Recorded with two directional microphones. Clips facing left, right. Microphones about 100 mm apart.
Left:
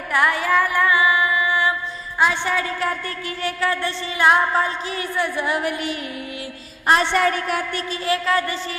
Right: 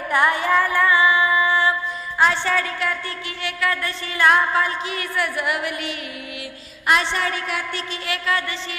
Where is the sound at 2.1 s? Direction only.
15° left (ahead or behind).